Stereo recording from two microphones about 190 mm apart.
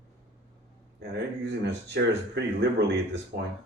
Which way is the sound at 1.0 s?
65° right (ahead or behind).